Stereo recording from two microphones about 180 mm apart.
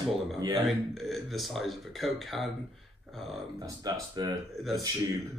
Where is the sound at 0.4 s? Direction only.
20° right (ahead or behind).